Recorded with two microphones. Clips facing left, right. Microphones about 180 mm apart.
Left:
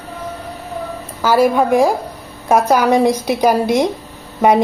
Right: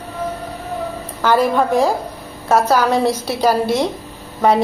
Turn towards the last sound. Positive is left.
turn(degrees=15)  # may be behind; listen again after turning